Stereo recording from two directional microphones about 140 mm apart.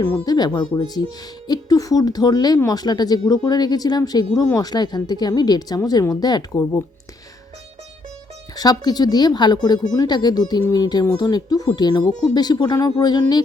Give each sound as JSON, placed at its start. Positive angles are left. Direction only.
{"t": 0.3, "sound": "speech", "side_deg": 30}
{"t": 8.5, "sound": "speech", "side_deg": 30}